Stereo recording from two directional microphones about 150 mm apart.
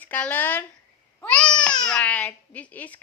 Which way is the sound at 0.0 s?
10° left (ahead or behind).